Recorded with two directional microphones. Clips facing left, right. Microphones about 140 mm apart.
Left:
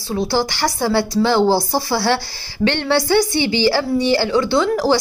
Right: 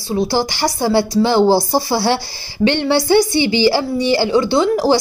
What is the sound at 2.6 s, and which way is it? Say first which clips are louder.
A woman's voice: right 2 dB; 10° right (ahead or behind).